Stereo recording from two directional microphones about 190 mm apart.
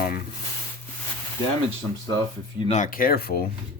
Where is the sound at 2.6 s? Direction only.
40° left (ahead or behind).